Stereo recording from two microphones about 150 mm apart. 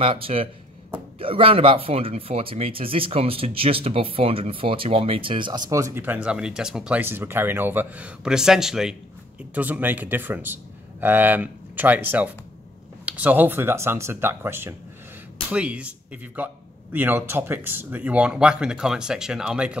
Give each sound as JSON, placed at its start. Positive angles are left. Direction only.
{"t": 0.0, "sound": "speech", "side_deg": -40}
{"t": 16.9, "sound": "speech", "side_deg": -15}